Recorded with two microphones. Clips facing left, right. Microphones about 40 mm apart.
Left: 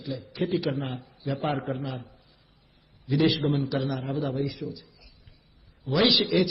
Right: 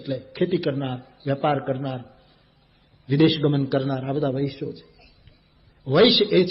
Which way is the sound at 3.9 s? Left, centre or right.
Right.